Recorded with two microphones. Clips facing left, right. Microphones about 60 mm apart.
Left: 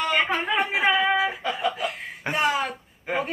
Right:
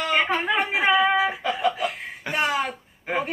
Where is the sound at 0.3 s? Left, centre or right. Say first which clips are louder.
Right 1 dB; centre.